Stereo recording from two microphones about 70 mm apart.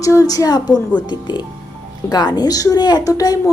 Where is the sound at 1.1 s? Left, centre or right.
Left.